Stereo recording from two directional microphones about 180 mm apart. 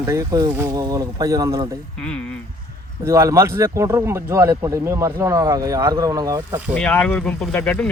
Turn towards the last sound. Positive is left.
turn(degrees=10)  # may be behind; listen again after turning